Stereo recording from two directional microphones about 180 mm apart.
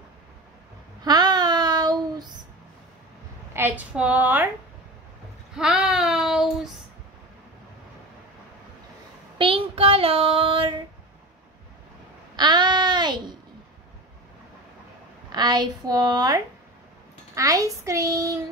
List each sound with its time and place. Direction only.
1.0 s child singing: 20° right (ahead or behind)
3.5 s a child's voice: 10° right (ahead or behind)
5.6 s child singing: 5° right (ahead or behind)
9.4 s child singing: 30° right (ahead or behind)
12.4 s a sound: 25° right (ahead or behind)
15.3 s a woman's voice: 25° right (ahead or behind)
17.4 s a child's voice: 20° right (ahead or behind)